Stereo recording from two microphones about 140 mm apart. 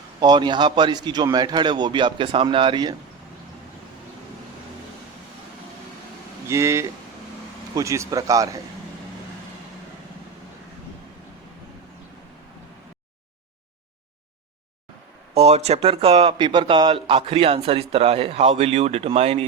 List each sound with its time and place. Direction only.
0.2 s a man's voice: 30° right (ahead or behind)
6.5 s a man's voice: 20° right (ahead or behind)
15.4 s a man's voice: 50° right (ahead or behind)